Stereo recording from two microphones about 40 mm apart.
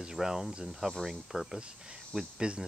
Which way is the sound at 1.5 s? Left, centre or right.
Right.